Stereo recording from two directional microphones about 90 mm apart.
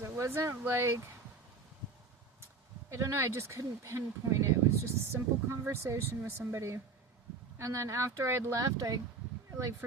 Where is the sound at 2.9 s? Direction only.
30° right (ahead or behind).